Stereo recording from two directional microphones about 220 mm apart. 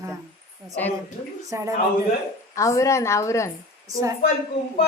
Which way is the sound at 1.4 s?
15° right (ahead or behind).